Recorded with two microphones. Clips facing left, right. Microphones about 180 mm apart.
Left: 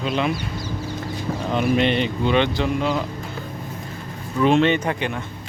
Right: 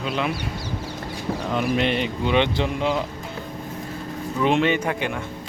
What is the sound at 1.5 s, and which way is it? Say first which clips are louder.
Speech: left 3 dB; centre (ahead or behind).